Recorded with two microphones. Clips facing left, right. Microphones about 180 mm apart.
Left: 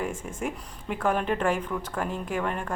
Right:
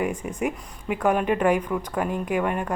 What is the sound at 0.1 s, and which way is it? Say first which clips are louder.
Speech: right 5 dB; 50° left (ahead or behind).